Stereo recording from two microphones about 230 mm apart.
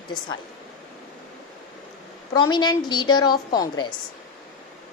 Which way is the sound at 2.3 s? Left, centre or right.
Centre.